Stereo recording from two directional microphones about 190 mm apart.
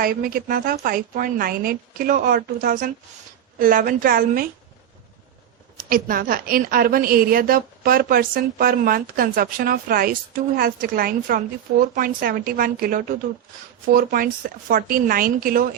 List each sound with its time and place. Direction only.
0.0 s a woman's voice: 50° right (ahead or behind)
5.7 s a woman's voice: 50° right (ahead or behind)